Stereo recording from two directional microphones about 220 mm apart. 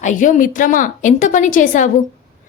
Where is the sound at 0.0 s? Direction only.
35° left (ahead or behind).